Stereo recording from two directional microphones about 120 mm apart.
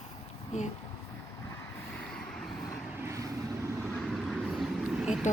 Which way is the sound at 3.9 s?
Centre (ahead or behind).